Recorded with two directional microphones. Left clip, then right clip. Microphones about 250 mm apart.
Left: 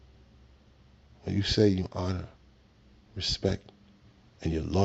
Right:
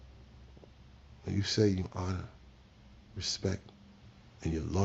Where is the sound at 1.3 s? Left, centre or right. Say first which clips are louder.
Left 5 dB; left.